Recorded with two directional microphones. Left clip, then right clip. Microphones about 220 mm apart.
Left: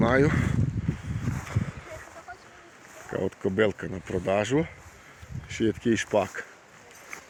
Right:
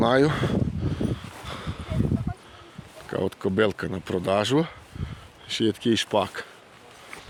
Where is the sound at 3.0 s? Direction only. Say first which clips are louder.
Right 2 dB; 10° right (ahead or behind).